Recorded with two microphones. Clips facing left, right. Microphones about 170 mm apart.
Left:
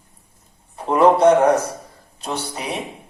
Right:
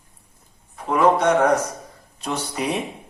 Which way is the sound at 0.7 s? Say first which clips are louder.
Left 3 dB; 30° left (ahead or behind).